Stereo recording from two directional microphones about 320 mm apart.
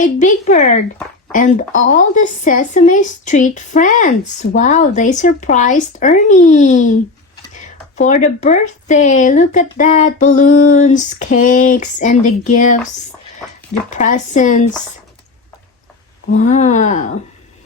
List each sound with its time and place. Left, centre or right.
0.0 s a woman's voice: left
13.9 s a woman's voice: left
16.4 s a woman's voice: left